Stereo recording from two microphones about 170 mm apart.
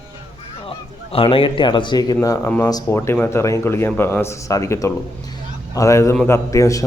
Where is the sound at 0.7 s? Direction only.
35° left (ahead or behind).